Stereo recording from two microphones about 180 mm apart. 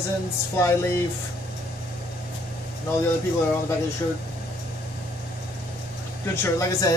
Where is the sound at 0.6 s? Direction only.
15° left (ahead or behind).